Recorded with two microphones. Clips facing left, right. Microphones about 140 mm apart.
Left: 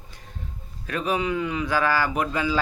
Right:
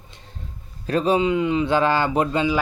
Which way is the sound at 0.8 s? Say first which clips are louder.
Right 6 dB; 30° right (ahead or behind).